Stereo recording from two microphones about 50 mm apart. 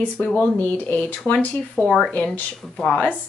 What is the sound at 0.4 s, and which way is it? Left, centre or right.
A woman's voice, left.